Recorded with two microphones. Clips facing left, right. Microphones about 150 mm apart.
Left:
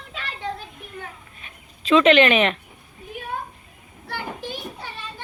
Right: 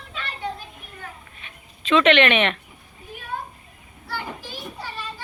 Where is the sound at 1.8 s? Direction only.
35° left (ahead or behind).